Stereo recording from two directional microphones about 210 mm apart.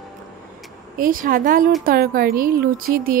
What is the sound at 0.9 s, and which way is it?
A woman's voice, 40° right (ahead or behind).